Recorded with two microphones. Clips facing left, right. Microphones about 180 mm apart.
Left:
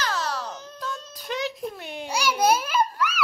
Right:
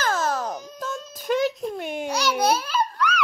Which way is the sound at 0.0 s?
50° right (ahead or behind).